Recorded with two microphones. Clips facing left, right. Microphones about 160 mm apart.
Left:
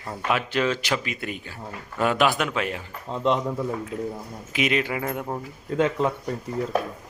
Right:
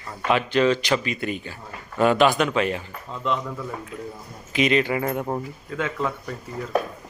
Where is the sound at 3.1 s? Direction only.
30° left (ahead or behind).